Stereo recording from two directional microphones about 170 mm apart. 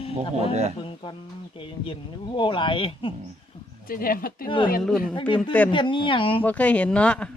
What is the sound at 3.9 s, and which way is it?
Speech, 55° left (ahead or behind).